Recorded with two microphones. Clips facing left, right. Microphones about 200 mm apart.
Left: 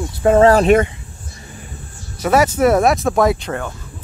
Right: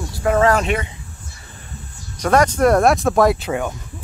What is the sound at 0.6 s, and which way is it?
Speech, 50° left (ahead or behind).